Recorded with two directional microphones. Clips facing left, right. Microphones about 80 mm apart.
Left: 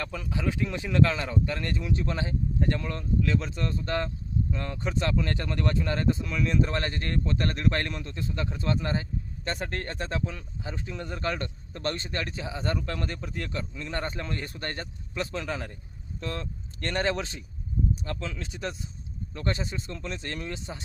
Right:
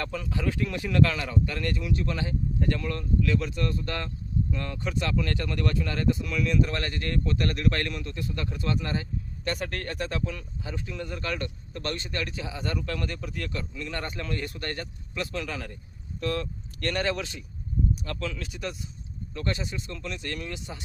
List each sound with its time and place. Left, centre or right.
0.0 s speech: centre; by 20.8 s left